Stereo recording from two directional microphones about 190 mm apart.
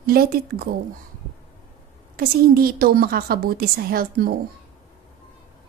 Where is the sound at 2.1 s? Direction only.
50° right (ahead or behind).